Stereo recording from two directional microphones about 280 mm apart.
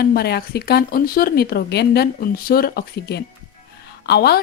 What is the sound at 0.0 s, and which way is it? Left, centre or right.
Speech, left.